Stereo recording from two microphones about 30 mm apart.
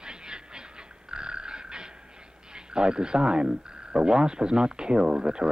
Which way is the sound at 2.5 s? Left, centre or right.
Right.